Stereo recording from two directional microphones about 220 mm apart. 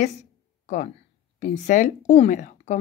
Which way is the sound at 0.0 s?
30° left (ahead or behind).